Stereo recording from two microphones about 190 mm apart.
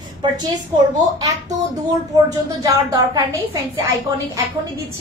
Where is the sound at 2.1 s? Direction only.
20° right (ahead or behind).